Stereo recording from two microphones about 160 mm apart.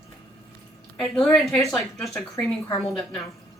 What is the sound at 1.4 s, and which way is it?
Speech, 20° left (ahead or behind).